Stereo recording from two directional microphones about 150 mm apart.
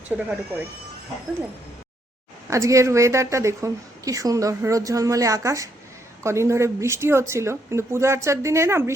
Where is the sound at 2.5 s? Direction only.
20° right (ahead or behind).